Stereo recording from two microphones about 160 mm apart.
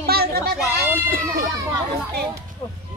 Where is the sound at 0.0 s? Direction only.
75° right (ahead or behind).